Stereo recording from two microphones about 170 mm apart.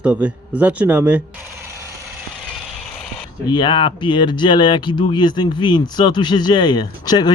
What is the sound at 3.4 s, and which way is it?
Speech, 25° left (ahead or behind).